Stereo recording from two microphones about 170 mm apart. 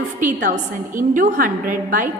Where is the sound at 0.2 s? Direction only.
50° right (ahead or behind).